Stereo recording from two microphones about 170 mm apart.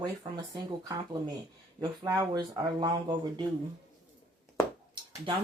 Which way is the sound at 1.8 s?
20° right (ahead or behind).